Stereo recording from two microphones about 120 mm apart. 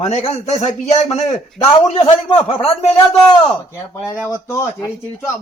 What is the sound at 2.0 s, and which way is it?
Speech, 60° left (ahead or behind).